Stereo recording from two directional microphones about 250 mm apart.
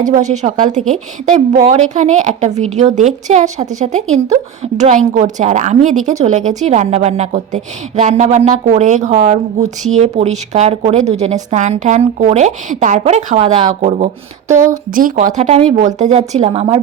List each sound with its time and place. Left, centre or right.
0.3 s speech: right